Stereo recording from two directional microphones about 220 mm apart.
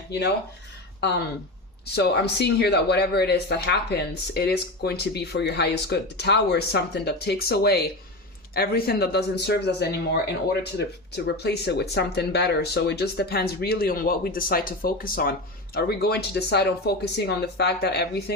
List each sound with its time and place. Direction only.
1.8 s speech: 50° left (ahead or behind)